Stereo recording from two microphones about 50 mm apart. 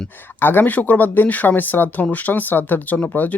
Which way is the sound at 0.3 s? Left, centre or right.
Left.